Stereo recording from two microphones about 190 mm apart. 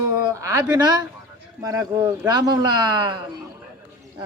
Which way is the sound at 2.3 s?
20° right (ahead or behind).